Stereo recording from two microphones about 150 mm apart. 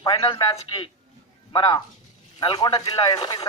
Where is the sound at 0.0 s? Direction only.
25° left (ahead or behind).